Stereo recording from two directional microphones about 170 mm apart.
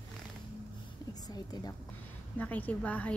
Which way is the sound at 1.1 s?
20° left (ahead or behind).